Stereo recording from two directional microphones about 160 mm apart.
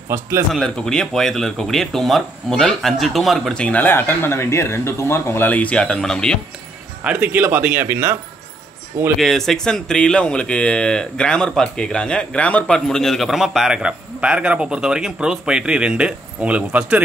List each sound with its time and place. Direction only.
0.1 s speech: 15° right (ahead or behind)
0.5 s speech: 5° left (ahead or behind)
7.0 s speech: 10° right (ahead or behind)
9.2 s speech: centre (ahead or behind)